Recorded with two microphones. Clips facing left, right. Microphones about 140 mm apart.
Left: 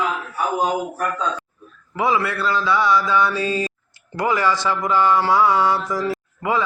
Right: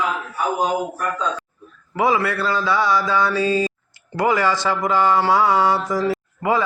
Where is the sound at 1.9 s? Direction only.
35° right (ahead or behind).